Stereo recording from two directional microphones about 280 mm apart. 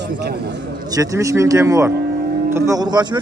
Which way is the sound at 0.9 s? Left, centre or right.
Centre.